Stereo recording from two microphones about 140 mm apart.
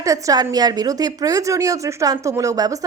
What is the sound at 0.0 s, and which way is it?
A woman's voice, 25° right (ahead or behind).